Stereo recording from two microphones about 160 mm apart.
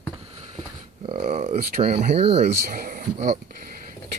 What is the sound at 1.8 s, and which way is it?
Speech, 40° right (ahead or behind).